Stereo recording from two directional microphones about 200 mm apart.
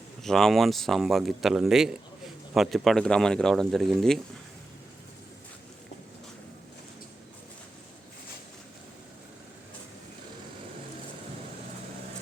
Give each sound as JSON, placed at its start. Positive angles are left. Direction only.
{"t": 0.2, "sound": "speech", "side_deg": 0}